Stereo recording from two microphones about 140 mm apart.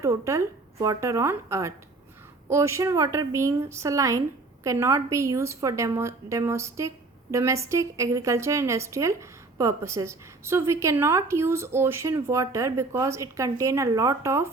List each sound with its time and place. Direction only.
0.0 s a woman's voice: 20° right (ahead or behind)